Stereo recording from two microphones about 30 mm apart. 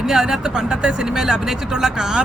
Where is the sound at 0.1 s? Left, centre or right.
Centre.